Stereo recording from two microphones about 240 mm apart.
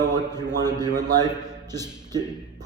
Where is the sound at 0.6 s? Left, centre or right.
Centre.